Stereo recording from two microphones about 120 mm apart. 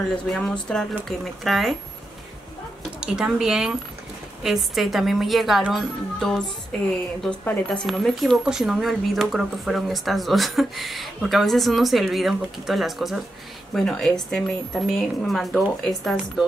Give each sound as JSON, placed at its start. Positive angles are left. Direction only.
{"t": 0.3, "sound": "speech", "side_deg": 5}
{"t": 2.8, "sound": "speech", "side_deg": -5}